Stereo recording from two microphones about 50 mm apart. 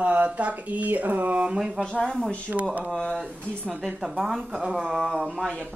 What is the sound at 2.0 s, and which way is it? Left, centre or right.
Speech, centre.